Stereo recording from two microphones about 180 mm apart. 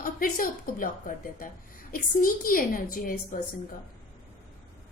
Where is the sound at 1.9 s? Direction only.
50° left (ahead or behind).